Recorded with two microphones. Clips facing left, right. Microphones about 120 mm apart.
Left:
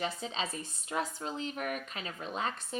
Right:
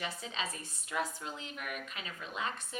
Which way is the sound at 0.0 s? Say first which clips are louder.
Left 4 dB; 30° left (ahead or behind).